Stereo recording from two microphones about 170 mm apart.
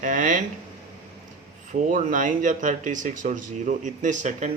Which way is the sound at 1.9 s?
50° right (ahead or behind).